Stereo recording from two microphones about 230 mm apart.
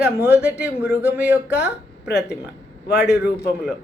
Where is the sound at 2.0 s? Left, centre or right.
Left.